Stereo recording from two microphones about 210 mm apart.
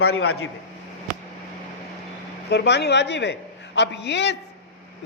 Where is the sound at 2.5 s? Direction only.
55° left (ahead or behind).